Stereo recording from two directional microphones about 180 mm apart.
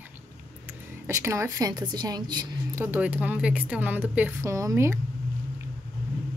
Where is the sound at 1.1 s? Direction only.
15° right (ahead or behind).